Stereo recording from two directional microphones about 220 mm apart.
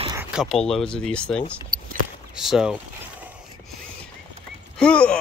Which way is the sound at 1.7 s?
40° right (ahead or behind).